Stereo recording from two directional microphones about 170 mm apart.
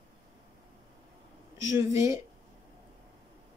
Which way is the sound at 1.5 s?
15° right (ahead or behind).